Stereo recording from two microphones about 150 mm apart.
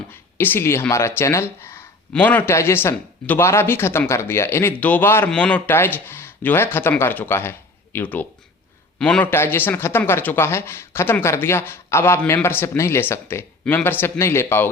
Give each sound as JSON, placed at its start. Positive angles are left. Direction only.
{"t": 0.1, "sound": "a man's voice", "side_deg": 15}